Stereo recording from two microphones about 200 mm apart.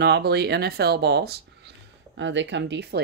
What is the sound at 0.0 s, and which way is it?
Speech, 55° right (ahead or behind).